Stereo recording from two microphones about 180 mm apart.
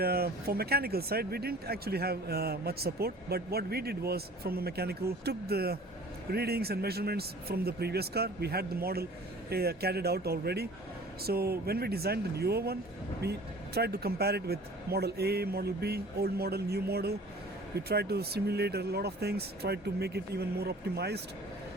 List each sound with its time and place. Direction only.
0.0 s speech: 60° right (ahead or behind)
13.7 s speech: 60° right (ahead or behind)